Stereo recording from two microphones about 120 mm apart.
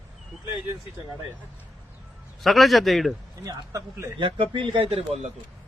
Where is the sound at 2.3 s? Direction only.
Centre (ahead or behind).